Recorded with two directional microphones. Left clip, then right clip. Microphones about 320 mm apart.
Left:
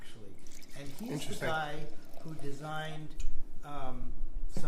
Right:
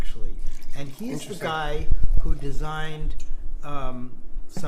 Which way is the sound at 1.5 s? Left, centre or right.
Right.